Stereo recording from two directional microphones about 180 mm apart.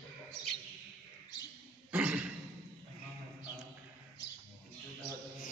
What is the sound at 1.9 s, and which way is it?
Cough, 5° right (ahead or behind).